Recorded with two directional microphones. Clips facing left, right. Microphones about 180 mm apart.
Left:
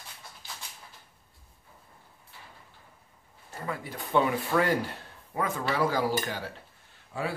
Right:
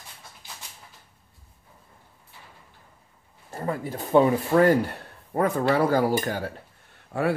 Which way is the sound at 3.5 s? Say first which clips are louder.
Right 7 dB; 35° right (ahead or behind).